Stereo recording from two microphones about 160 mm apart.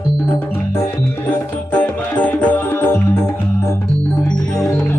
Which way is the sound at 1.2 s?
10° left (ahead or behind).